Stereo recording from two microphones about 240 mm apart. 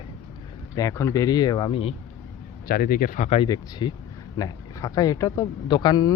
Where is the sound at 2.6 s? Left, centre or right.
Left.